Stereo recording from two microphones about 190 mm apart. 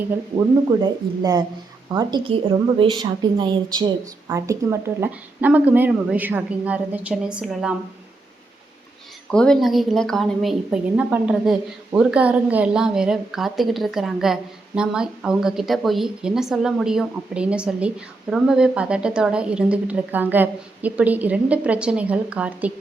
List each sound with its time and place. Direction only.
0.3 s a woman's voice: 20° right (ahead or behind); by 7.8 s 5° right (ahead or behind)
9.3 s a woman's voice: 5° left (ahead or behind)